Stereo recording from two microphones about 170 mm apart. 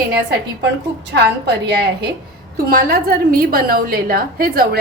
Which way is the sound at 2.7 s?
60° right (ahead or behind).